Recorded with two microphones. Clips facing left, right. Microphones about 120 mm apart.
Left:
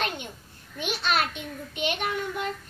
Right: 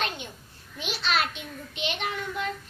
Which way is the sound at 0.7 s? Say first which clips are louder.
Left 2 dB; 50° left (ahead or behind).